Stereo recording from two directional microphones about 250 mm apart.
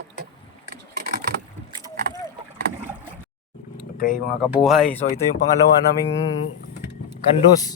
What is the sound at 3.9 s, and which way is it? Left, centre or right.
Vehicle, left.